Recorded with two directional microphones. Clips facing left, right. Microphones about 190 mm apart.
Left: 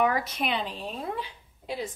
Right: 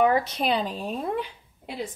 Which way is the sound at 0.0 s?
30° right (ahead or behind).